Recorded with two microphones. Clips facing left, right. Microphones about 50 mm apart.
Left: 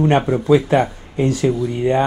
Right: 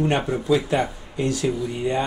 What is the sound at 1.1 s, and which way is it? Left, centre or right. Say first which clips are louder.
Speech: left 6 dB; left.